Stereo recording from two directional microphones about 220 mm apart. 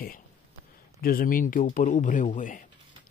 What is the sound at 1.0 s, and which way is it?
Speech, 40° left (ahead or behind).